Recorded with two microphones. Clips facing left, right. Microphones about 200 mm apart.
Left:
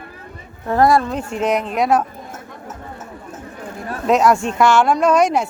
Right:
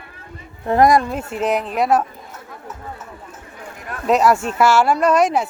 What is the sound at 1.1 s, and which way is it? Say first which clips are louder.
Speech: left 1 dB; 5° right (ahead or behind).